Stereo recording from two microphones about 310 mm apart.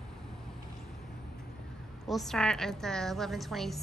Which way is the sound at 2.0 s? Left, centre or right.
Centre.